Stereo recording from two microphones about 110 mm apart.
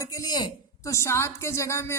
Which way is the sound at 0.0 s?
35° left (ahead or behind).